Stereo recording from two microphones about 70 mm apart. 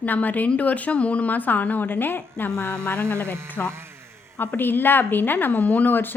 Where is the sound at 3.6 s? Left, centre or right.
Right.